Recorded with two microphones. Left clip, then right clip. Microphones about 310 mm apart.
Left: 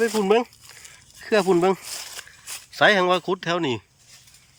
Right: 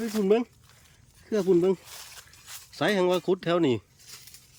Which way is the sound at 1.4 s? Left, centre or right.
Left.